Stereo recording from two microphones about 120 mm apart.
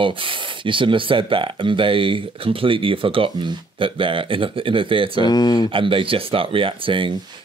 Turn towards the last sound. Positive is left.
turn(degrees=-45)  # may be behind; listen again after turning